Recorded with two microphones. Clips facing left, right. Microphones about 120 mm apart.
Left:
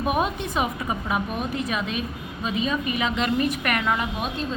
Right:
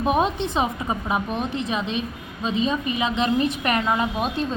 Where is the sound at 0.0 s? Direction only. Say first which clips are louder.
Right 3 dB; 25° right (ahead or behind).